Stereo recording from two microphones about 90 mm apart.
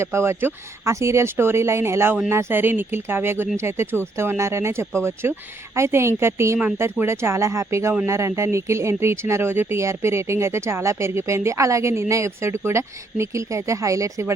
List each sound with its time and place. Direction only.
0.0 s speech: 30° right (ahead or behind)